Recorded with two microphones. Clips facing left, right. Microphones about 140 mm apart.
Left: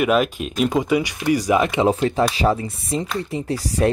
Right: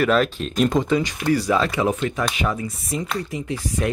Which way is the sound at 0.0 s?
10° left (ahead or behind).